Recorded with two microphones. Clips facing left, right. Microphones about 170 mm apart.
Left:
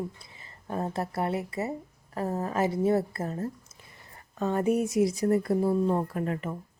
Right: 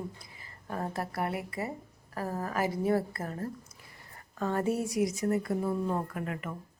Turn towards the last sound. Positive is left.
turn(degrees=30)  # may be behind; listen again after turning